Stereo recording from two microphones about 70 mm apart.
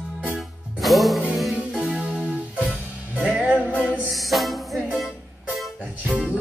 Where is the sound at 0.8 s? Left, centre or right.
Centre.